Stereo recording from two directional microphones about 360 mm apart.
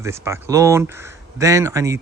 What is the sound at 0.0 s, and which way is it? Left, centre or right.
Speech, centre.